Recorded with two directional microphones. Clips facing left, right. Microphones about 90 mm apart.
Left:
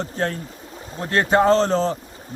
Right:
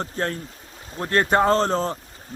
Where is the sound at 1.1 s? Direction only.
45° right (ahead or behind).